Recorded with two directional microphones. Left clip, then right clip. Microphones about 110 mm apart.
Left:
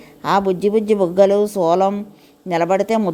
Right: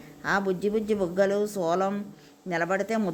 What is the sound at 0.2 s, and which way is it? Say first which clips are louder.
A woman's voice: left 10 dB; 60° left (ahead or behind).